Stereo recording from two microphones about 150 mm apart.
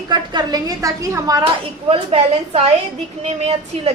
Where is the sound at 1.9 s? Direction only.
40° right (ahead or behind).